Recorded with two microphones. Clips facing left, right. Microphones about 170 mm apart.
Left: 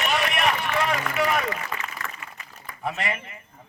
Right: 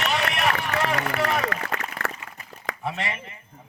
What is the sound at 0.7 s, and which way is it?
Run, 40° right (ahead or behind).